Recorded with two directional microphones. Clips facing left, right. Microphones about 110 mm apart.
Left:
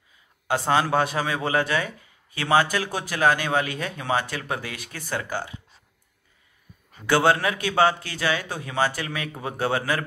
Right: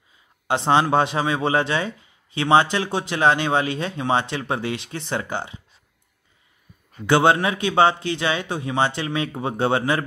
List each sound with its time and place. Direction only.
0.5 s a man's voice: 25° right (ahead or behind)
7.1 s a man's voice: 20° right (ahead or behind)